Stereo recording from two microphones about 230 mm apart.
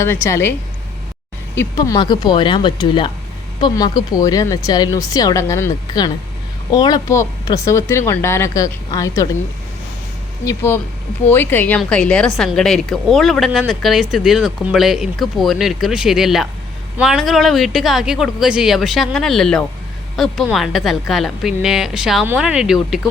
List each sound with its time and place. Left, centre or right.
0.0 s speech: centre
1.5 s speech: centre
10.4 s speech: centre